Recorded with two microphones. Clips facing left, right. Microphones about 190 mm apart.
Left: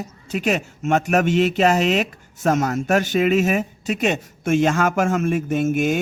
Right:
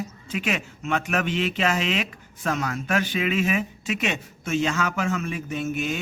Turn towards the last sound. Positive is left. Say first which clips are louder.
# left 8 dB
turn(degrees=50)  # may be behind; listen again after turning